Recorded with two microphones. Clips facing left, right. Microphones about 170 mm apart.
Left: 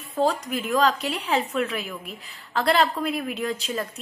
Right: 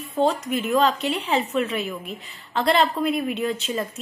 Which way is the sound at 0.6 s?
5° right (ahead or behind).